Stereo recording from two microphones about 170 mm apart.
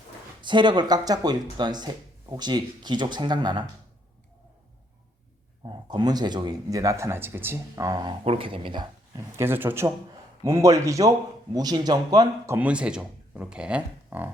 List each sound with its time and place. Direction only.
0.4 s speech: 25° right (ahead or behind)
5.6 s speech: 25° right (ahead or behind)
8.2 s speech: 35° right (ahead or behind)
12.5 s speech: 5° right (ahead or behind)